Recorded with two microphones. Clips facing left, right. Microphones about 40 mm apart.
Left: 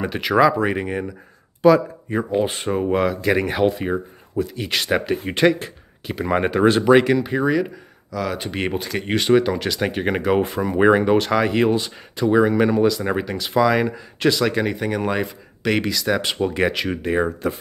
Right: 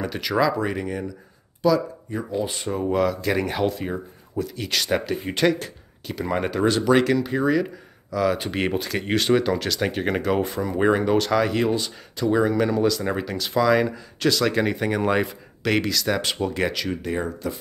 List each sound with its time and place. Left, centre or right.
0.0 s speech: left
2.8 s speech: left
8.1 s speech: centre
14.5 s speech: centre; by 17.6 s left